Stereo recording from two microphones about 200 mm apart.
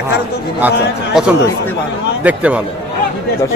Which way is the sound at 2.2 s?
5° right (ahead or behind).